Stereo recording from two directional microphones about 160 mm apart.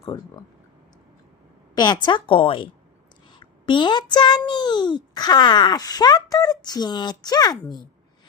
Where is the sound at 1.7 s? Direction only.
25° left (ahead or behind).